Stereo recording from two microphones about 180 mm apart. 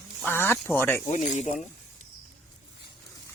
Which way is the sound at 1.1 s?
40° left (ahead or behind).